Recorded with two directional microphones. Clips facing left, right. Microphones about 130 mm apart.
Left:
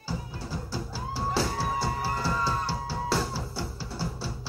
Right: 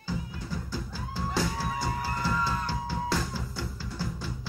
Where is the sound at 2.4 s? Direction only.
35° left (ahead or behind).